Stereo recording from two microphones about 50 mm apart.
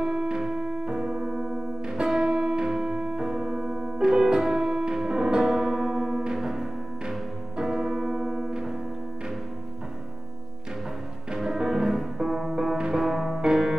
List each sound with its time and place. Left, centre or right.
0.0 s music: centre
11.3 s music: centre
12.7 s music: centre
13.0 s music: centre